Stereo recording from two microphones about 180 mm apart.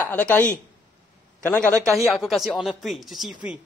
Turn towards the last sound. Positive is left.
turn(degrees=0)  # may be behind; listen again after turning